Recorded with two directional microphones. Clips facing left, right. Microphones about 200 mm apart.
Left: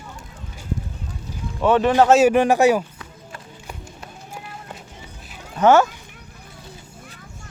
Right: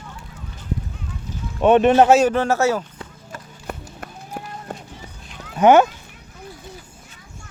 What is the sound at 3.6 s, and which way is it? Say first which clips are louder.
Run: right 8 dB; 50° right (ahead or behind).